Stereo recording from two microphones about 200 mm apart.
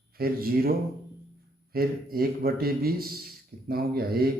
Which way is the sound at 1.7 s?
50° right (ahead or behind).